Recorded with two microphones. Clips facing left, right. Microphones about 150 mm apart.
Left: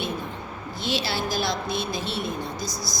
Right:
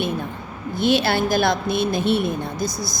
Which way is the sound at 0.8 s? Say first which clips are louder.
Right 9 dB; 55° right (ahead or behind).